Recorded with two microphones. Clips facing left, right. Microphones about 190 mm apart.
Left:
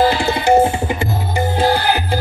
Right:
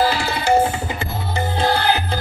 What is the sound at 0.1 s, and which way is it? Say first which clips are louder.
Tabla: left 4 dB; 20° left (ahead or behind).